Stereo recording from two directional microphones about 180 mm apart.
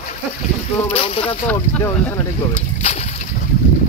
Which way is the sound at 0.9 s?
30° left (ahead or behind).